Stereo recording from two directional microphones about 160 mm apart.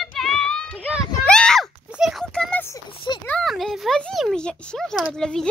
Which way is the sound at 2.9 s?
30° left (ahead or behind).